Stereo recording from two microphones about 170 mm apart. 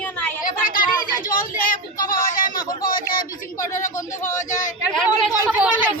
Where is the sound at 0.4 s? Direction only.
55° left (ahead or behind).